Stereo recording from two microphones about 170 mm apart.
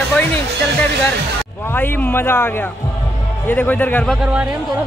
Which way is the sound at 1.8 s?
10° left (ahead or behind).